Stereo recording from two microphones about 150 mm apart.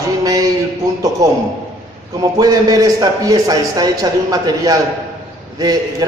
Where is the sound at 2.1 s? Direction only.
25° right (ahead or behind).